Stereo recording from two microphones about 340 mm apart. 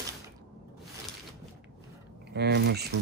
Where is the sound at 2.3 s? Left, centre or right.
Right.